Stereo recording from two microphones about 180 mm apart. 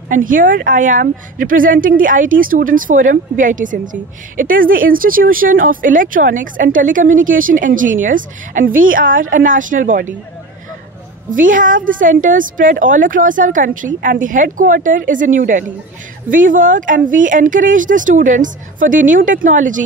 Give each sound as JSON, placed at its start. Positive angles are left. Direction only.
{"t": 0.1, "sound": "a woman's voice", "side_deg": -50}
{"t": 11.2, "sound": "a woman's voice", "side_deg": -45}